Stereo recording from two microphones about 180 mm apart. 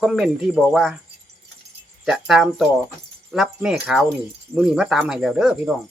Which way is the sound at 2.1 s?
Centre (ahead or behind).